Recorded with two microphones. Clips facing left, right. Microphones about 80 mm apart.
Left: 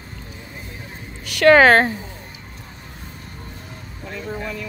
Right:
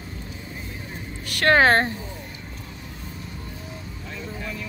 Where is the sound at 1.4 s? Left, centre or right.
Left.